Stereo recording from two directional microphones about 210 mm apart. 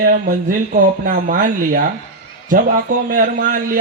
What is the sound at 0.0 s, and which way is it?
A man's voice, 45° right (ahead or behind).